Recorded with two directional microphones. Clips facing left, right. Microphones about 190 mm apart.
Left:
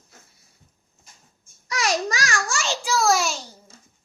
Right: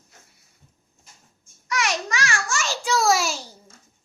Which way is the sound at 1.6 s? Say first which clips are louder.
Left 2 dB; 35° left (ahead or behind).